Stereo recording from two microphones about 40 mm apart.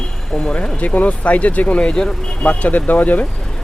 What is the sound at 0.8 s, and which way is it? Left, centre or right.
Speech, left.